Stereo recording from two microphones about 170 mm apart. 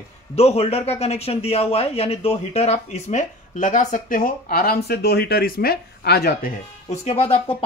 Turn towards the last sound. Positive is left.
turn(degrees=35)  # may be behind; listen again after turning